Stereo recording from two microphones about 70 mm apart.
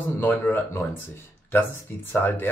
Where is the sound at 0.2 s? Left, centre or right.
Left.